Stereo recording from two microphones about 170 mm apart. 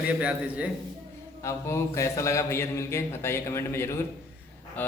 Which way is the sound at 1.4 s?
15° left (ahead or behind).